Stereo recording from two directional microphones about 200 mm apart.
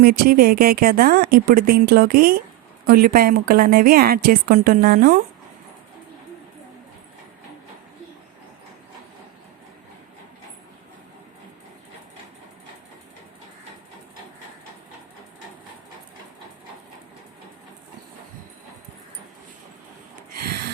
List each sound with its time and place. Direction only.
0.0 s speech: 50° right (ahead or behind)